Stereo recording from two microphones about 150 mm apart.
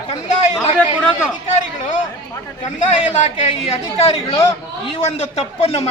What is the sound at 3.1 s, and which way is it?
A man's voice, 45° left (ahead or behind).